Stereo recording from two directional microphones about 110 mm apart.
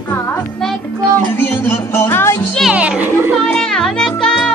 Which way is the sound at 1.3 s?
20° left (ahead or behind).